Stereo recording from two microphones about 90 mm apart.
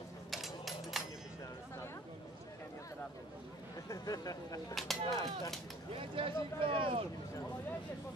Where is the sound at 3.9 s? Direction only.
40° left (ahead or behind).